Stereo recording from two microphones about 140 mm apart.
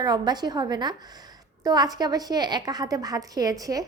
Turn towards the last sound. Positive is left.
turn(degrees=-25)  # may be behind; listen again after turning